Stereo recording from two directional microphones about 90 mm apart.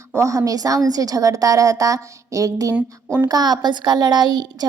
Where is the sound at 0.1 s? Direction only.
35° right (ahead or behind).